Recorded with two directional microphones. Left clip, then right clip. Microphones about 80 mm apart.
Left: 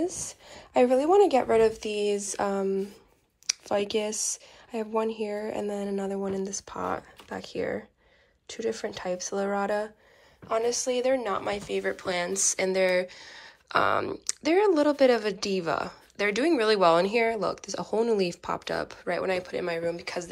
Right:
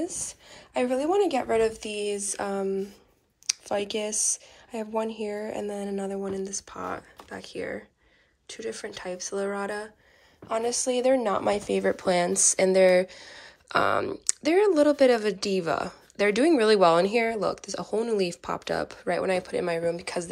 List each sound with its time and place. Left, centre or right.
0.0 s a woman's voice: right
10.7 s a woman's voice: right